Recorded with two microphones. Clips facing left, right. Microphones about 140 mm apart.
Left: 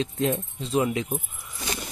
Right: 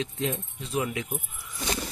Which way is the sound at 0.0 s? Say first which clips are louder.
Left 5 dB; 40° left (ahead or behind).